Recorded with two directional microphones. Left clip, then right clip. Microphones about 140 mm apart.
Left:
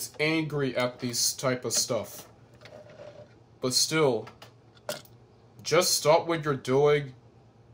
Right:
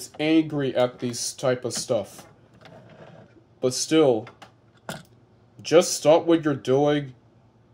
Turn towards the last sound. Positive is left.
turn(degrees=-15)  # may be behind; listen again after turning